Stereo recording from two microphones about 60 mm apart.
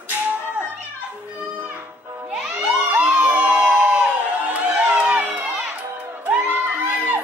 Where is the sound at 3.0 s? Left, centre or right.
Right.